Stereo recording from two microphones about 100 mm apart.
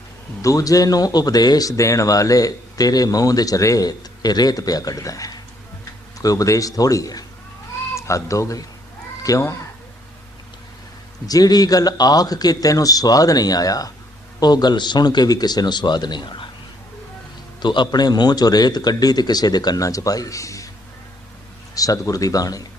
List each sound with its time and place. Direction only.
0.4 s speech: 35° left (ahead or behind)
11.3 s a man's voice: 40° left (ahead or behind)
17.6 s speech: 50° left (ahead or behind); by 20.7 s 35° left (ahead or behind)
21.8 s speech: 35° left (ahead or behind)